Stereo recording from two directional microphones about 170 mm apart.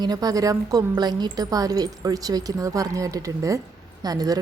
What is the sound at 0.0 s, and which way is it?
A woman's voice, 25° right (ahead or behind).